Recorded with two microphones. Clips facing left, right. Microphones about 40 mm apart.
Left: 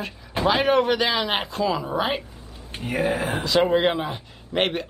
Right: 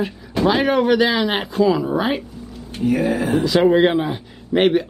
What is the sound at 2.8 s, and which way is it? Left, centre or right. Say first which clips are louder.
Speech: right 5 dB; left.